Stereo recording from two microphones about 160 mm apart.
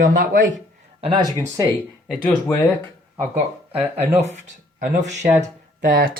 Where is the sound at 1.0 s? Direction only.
30° right (ahead or behind).